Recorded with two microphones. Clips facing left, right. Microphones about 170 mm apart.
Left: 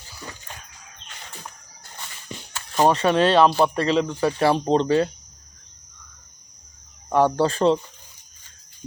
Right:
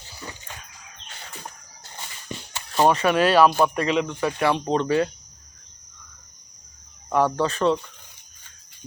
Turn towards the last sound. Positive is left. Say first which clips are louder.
# left 3 dB
turn(degrees=30)  # may be behind; listen again after turning